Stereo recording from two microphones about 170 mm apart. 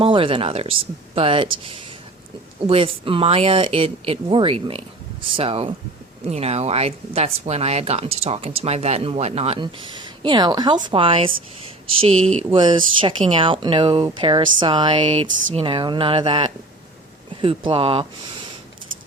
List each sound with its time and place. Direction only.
0.0 s speech: 30° right (ahead or behind)